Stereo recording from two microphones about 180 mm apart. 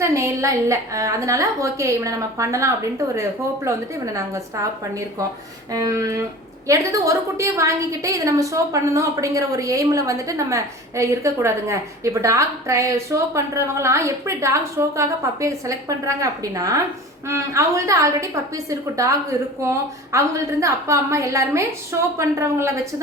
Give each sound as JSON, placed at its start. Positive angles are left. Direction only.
{"t": 0.0, "sound": "a woman's voice", "side_deg": -15}
{"t": 5.7, "sound": "a sound", "side_deg": -20}
{"t": 6.7, "sound": "a woman's voice", "side_deg": -15}